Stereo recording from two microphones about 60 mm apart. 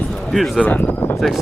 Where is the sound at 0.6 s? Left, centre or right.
Left.